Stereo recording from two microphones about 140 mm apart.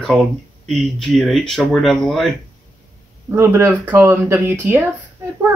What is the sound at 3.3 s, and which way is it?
Speech, 15° right (ahead or behind).